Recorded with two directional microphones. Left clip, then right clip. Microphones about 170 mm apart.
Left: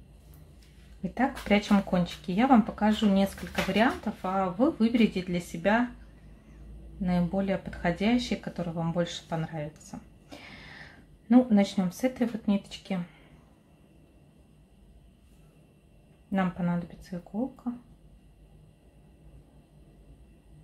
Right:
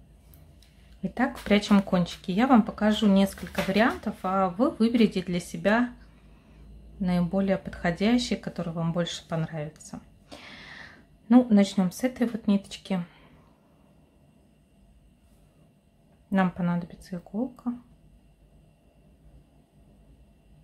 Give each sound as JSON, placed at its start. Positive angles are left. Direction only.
{"t": 1.1, "sound": "speech", "side_deg": -15}
{"t": 7.0, "sound": "speech", "side_deg": -20}
{"t": 16.3, "sound": "speech", "side_deg": -20}